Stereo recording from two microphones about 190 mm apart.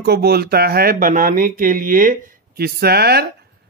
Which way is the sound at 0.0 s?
55° right (ahead or behind).